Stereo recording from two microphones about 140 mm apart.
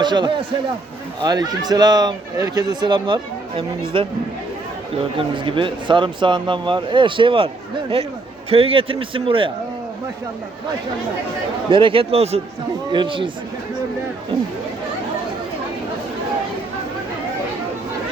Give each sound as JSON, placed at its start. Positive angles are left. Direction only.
{"t": 0.0, "sound": "speech", "side_deg": -30}
{"t": 5.3, "sound": "speech", "side_deg": -35}
{"t": 11.7, "sound": "speech", "side_deg": -40}
{"t": 12.9, "sound": "speech", "side_deg": -35}